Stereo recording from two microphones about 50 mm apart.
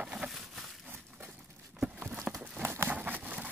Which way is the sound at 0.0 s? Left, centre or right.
Centre.